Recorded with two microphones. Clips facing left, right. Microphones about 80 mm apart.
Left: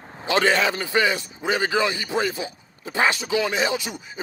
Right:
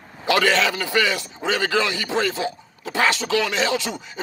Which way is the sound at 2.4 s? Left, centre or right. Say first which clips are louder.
Right 6 dB; right.